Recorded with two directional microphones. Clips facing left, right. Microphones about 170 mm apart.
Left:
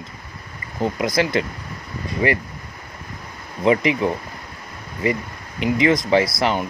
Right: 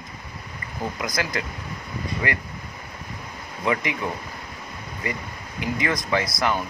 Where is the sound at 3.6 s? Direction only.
20° left (ahead or behind).